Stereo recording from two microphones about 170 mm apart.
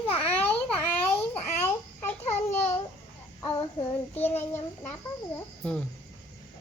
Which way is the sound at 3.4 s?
25° left (ahead or behind).